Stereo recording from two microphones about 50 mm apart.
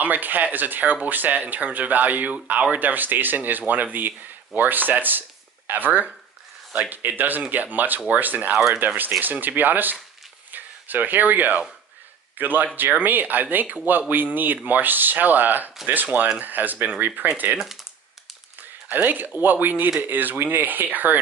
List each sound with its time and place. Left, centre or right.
0.0 s speech: right
18.6 s speech: right